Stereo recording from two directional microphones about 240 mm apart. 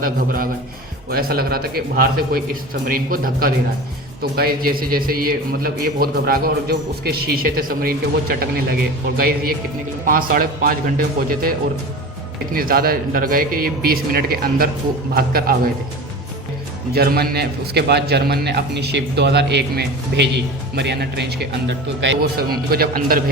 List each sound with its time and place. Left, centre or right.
0.0 s a man's voice: right
12.5 s a man's voice: right
16.9 s a man's voice: right